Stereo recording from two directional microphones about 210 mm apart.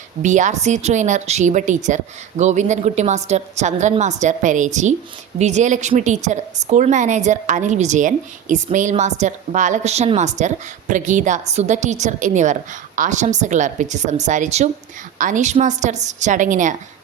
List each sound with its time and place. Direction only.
0.2 s a woman's voice: 35° right (ahead or behind)